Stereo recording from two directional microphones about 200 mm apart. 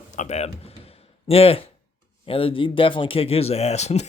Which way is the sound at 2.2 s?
25° left (ahead or behind).